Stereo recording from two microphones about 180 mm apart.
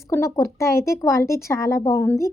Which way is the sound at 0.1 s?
15° left (ahead or behind).